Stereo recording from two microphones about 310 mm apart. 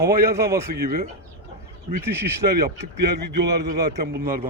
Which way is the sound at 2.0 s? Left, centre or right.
Centre.